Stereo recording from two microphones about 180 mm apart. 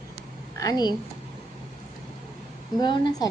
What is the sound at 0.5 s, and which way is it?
Speech, 20° left (ahead or behind).